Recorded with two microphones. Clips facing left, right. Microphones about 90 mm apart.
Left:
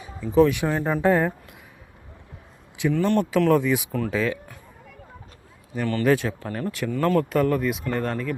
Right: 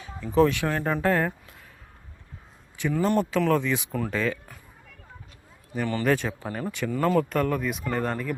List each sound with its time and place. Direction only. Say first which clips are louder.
0.2 s speech: left 3 dB; 5° left (ahead or behind)
0.5 s speech: left 2 dB; 15° left (ahead or behind)
0.8 s speech: left 2 dB; 5° left (ahead or behind)
1.0 s speech: left 4 dB; 15° left (ahead or behind)
2.9 s speech: left 1 dB; 10° right (ahead or behind)
3.3 s speech: left 4 dB; 5° left (ahead or behind)
3.9 s speech: left 3 dB; centre (ahead or behind)
5.7 s speech: left 3 dB; 5° right (ahead or behind)